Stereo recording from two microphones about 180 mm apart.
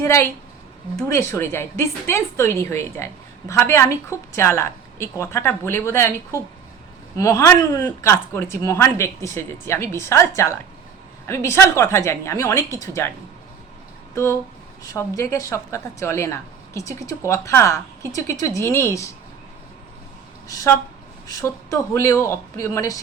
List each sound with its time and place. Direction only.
0.0 s a woman's voice: 15° left (ahead or behind)
14.9 s a woman's voice: 15° left (ahead or behind)
20.5 s a woman's voice: 20° left (ahead or behind)